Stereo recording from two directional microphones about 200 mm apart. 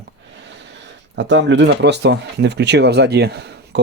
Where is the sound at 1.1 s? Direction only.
65° right (ahead or behind).